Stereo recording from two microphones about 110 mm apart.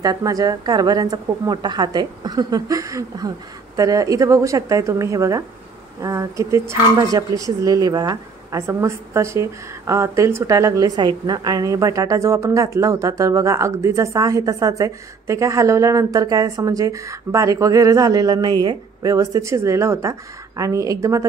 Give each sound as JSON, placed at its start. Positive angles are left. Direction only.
{"t": 0.0, "sound": "a woman's voice", "side_deg": -30}